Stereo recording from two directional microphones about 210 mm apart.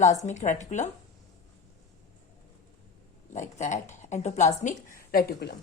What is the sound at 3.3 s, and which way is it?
A woman's voice, 35° left (ahead or behind).